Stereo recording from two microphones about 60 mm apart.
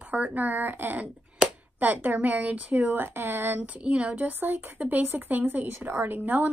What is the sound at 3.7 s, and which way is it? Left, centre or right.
Speech, centre.